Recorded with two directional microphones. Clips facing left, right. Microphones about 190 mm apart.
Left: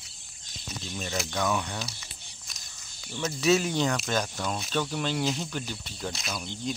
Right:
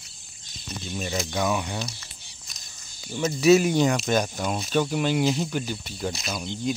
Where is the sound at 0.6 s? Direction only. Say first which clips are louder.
Right 4 dB; 10° right (ahead or behind).